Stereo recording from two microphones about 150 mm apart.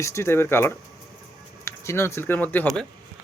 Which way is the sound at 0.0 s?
20° left (ahead or behind).